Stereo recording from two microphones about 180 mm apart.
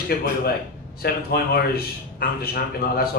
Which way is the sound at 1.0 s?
60° left (ahead or behind).